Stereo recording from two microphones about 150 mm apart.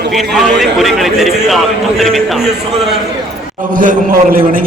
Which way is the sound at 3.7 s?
70° right (ahead or behind).